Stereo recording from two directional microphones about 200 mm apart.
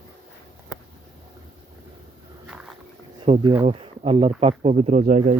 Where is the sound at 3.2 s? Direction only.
25° right (ahead or behind).